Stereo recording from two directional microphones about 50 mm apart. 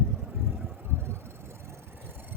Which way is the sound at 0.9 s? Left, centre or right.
Right.